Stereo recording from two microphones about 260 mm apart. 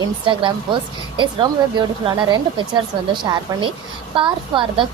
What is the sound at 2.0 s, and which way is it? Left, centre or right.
A woman's voice, centre.